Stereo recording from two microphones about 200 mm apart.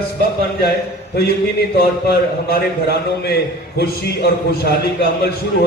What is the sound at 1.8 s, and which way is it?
A man's voice, 50° left (ahead or behind).